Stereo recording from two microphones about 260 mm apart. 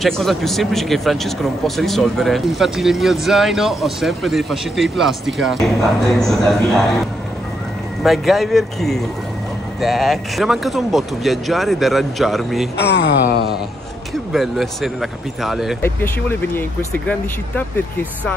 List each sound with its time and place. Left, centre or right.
0.0 s a man's voice: centre
12.7 s speech: left
14.3 s a man's voice: centre